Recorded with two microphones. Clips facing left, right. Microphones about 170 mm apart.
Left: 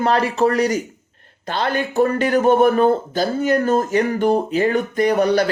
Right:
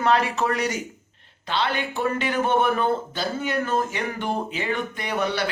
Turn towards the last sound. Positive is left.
turn(degrees=40)  # may be behind; listen again after turning